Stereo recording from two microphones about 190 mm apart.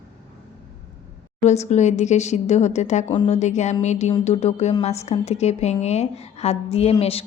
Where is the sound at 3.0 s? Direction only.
25° left (ahead or behind).